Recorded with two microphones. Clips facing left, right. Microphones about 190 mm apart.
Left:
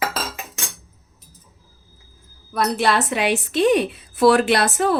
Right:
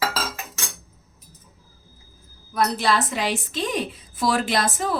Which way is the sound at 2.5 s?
65° left (ahead or behind).